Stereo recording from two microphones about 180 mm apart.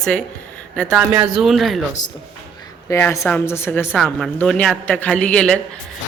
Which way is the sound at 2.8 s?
15° left (ahead or behind).